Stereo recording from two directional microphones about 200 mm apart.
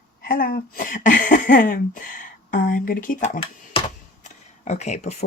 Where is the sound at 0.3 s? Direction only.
45° left (ahead or behind).